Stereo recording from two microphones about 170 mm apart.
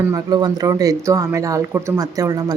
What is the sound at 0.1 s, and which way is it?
Speech, 25° right (ahead or behind).